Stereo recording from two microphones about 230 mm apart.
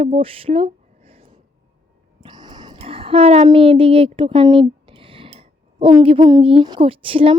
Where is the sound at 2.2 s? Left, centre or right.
Centre.